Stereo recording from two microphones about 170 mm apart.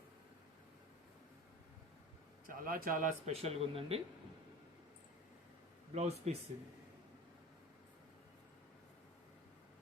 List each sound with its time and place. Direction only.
2.5 s a man's voice: 55° right (ahead or behind)
3.3 s speech: 35° right (ahead or behind)
5.9 s speech: 40° right (ahead or behind)